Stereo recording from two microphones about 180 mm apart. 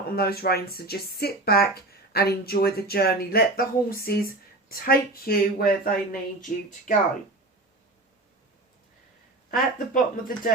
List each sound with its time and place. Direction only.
0.2 s speech: 60° left (ahead or behind); by 6.9 s 45° left (ahead or behind)
9.5 s speech: 50° left (ahead or behind)